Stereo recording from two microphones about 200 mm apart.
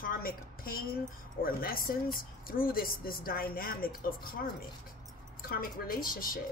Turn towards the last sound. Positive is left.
turn(degrees=45)  # may be behind; listen again after turning